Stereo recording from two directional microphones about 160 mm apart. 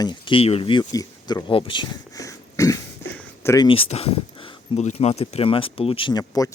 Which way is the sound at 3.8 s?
40° left (ahead or behind).